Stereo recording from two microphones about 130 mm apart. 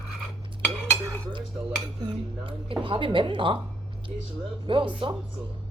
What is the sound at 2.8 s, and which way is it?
Speech, 40° right (ahead or behind).